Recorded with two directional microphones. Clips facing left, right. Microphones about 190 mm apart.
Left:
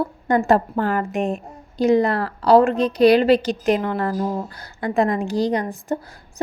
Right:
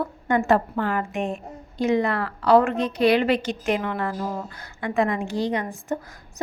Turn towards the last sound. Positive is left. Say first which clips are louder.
# left 4 dB
turn(degrees=35)  # may be behind; listen again after turning